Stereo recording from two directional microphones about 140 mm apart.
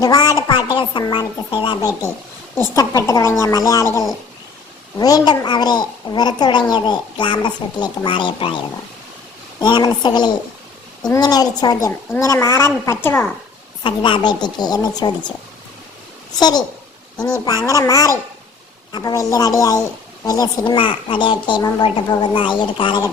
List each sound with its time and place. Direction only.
0.0 s a sound: 25° left (ahead or behind)
1.1 s a child's voice: 35° left (ahead or behind)
4.9 s a child's voice: 25° left (ahead or behind)
13.8 s a child's voice: 35° left (ahead or behind)
16.3 s a child's voice: 30° left (ahead or behind)